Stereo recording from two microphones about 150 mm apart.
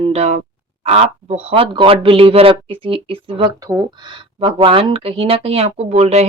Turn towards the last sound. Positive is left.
turn(degrees=-45)  # may be behind; listen again after turning